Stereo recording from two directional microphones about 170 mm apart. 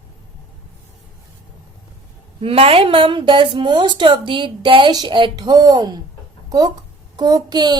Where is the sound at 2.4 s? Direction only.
35° right (ahead or behind).